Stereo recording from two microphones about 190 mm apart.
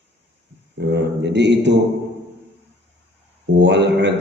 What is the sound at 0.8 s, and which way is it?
Speech, 65° right (ahead or behind).